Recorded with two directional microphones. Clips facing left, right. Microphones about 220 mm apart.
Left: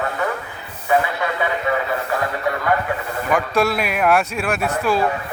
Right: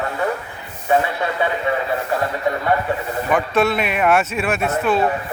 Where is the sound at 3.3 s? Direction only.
Centre (ahead or behind).